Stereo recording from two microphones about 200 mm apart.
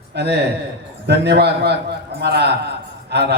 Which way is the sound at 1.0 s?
55° right (ahead or behind).